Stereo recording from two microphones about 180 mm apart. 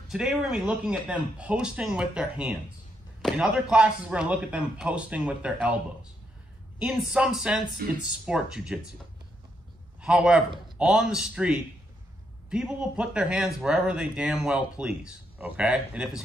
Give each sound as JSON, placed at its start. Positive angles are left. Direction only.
{"t": 0.1, "sound": "speech", "side_deg": -5}
{"t": 6.8, "sound": "speech", "side_deg": -5}
{"t": 10.0, "sound": "speech", "side_deg": -5}